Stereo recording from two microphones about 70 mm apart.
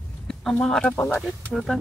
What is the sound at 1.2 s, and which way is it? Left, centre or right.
Speech, centre.